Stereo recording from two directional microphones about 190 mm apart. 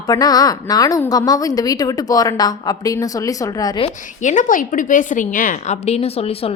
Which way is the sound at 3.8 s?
40° left (ahead or behind).